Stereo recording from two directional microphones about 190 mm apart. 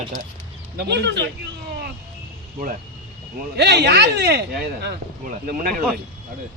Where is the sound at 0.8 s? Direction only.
60° right (ahead or behind).